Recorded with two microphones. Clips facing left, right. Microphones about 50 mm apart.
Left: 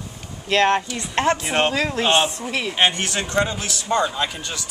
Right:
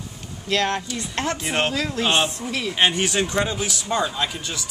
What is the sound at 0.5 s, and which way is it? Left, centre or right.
Speech, left.